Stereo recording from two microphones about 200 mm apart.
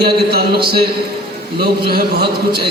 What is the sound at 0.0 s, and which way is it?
Speech, 50° right (ahead or behind).